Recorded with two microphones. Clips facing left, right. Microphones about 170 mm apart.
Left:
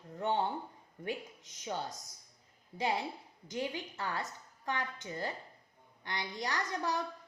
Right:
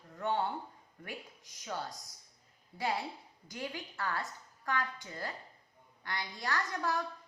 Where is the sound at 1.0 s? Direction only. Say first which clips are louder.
Left 7 dB; 20° left (ahead or behind).